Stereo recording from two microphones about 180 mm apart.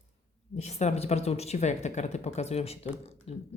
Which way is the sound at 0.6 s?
35° left (ahead or behind).